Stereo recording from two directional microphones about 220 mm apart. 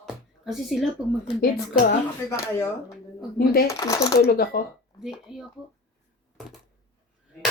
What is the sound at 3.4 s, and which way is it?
Speech, 45° left (ahead or behind).